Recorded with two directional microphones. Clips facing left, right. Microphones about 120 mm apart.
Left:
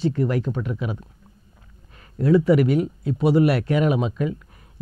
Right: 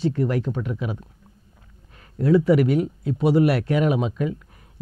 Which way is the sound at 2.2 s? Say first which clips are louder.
Even; 15° left (ahead or behind).